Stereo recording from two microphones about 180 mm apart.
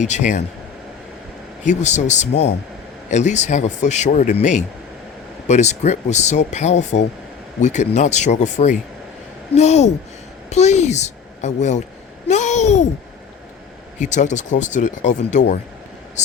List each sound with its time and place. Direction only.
0.0 s speech: 40° left (ahead or behind)
1.6 s a child's voice: 40° left (ahead or behind)
12.3 s a sound: 40° left (ahead or behind)
14.0 s speech: 40° left (ahead or behind)